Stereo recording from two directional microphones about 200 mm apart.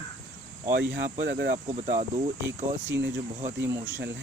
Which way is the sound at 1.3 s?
60° right (ahead or behind).